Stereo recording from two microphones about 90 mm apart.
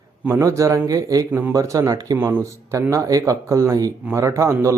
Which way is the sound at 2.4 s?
35° right (ahead or behind).